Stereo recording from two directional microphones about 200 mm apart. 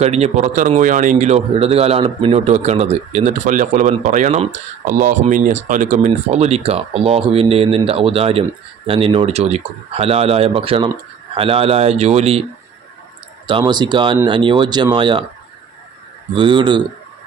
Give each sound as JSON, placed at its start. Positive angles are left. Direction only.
{"t": 0.0, "sound": "speech", "side_deg": -35}
{"t": 13.5, "sound": "speech", "side_deg": -25}
{"t": 16.3, "sound": "speech", "side_deg": -25}